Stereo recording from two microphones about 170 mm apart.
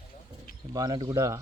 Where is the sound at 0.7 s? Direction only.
20° right (ahead or behind).